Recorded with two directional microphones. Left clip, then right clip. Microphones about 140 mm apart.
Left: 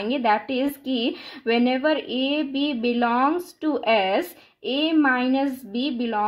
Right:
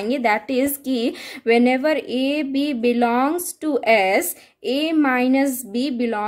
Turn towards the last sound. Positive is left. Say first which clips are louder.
# right 3 dB
turn(degrees=-30)  # may be behind; listen again after turning